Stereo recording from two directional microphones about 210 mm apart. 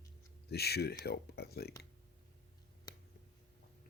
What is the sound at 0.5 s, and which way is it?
Speech, 50° left (ahead or behind).